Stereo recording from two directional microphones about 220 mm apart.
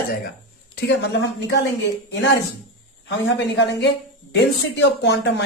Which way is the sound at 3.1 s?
55° left (ahead or behind).